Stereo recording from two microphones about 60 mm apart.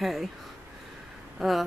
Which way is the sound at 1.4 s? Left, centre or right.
Centre.